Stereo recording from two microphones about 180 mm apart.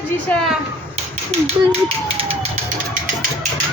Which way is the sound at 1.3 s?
35° right (ahead or behind).